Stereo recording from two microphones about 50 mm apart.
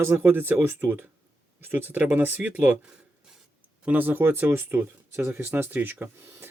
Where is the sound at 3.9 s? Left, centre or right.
Right.